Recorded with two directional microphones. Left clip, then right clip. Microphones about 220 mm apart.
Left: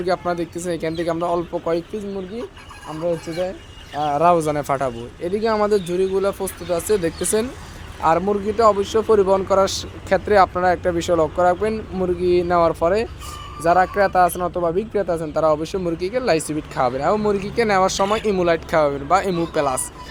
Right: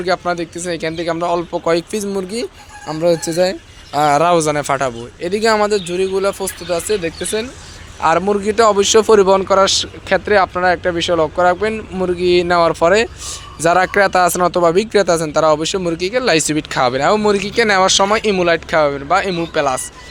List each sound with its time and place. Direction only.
0.0 s speech: centre (ahead or behind)
3.0 s speech: 35° right (ahead or behind)
4.1 s speech: 10° right (ahead or behind); by 7.1 s 5° left (ahead or behind)
8.2 s speech: 10° right (ahead or behind)